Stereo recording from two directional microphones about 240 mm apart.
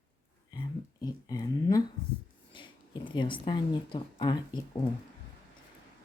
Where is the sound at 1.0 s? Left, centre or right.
Centre.